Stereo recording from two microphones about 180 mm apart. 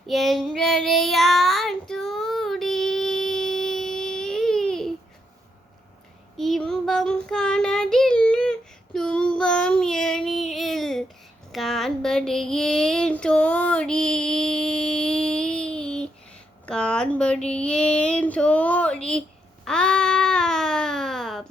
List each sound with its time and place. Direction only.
0.1 s child singing: centre (ahead or behind)
6.3 s child singing: centre (ahead or behind)
11.5 s a sound: centre (ahead or behind)
17.5 s child singing: 5° left (ahead or behind)
19.6 s baby cry: 5° left (ahead or behind)